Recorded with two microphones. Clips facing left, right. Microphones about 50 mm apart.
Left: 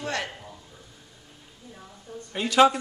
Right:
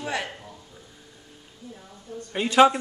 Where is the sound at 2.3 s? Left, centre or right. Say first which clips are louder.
Right 2 dB; centre.